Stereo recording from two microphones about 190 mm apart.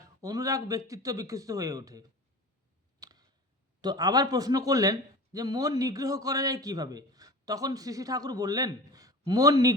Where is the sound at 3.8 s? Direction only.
20° right (ahead or behind).